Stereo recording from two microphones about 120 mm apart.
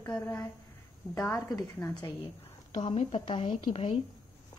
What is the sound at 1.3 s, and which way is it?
Speech, 30° left (ahead or behind).